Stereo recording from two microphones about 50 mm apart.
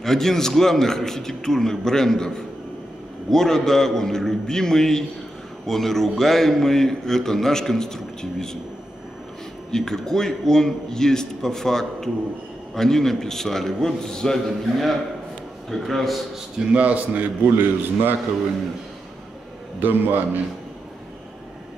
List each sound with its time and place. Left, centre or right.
0.0 s a man's voice: centre
9.7 s a man's voice: centre
16.5 s a man's voice: right
19.8 s a man's voice: right